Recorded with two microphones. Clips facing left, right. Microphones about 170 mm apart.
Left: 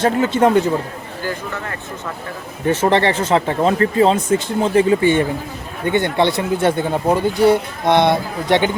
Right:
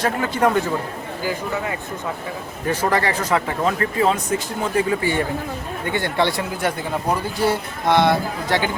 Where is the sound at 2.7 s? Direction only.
25° left (ahead or behind).